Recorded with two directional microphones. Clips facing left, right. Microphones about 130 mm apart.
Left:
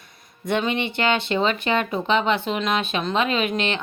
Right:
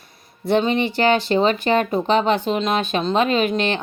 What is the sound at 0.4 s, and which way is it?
Speech, 35° right (ahead or behind).